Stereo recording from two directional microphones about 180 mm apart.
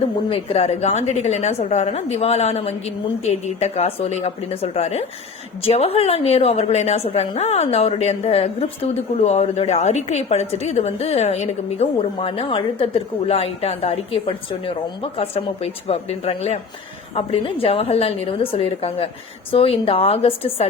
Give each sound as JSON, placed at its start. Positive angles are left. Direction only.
{"t": 0.3, "sound": "a woman's voice", "side_deg": 35}